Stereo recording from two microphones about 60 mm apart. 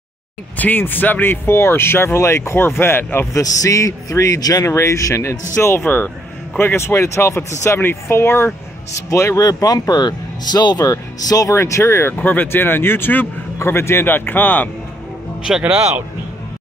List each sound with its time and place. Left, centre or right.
0.6 s speech: left
3.3 s a man's voice: left
4.6 s a man's voice: left
5.6 s speech: left
5.9 s speech: left
6.6 s speech: left
9.1 s speech: left
9.4 s speech: left
10.8 s speech: left
11.5 s speech: left
12.3 s speech: left
15.5 s speech: centre